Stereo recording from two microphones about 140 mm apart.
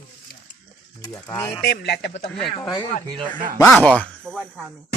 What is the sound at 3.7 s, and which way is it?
Speech, 5° left (ahead or behind).